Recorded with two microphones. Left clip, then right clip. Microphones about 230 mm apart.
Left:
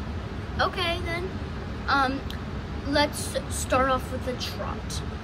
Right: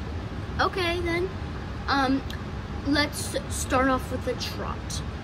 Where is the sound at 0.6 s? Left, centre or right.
Centre.